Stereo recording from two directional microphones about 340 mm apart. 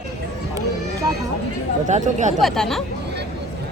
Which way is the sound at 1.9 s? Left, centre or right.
Right.